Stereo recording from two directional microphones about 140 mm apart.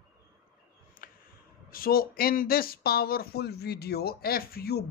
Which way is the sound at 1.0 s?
90° left.